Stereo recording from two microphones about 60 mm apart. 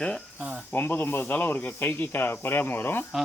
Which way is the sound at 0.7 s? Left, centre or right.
Left.